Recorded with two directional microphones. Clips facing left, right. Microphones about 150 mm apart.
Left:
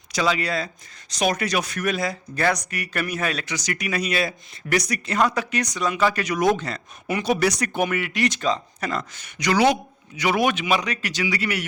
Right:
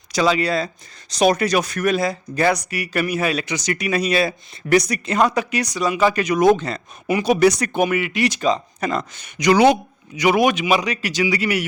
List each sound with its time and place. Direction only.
0.1 s speech: 30° right (ahead or behind)
2.3 s a man's voice: 10° right (ahead or behind)
3.4 s speech: 20° right (ahead or behind); by 6.1 s 5° right (ahead or behind)
6.1 s speech: 20° right (ahead or behind)
7.1 s speech: 15° right (ahead or behind)
7.9 s speech: 5° right (ahead or behind)
8.4 s a man's voice: 20° right (ahead or behind)